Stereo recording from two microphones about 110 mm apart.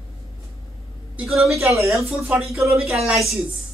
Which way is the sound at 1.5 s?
25° right (ahead or behind).